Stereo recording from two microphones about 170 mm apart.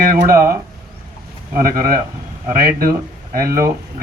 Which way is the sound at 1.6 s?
60° right (ahead or behind).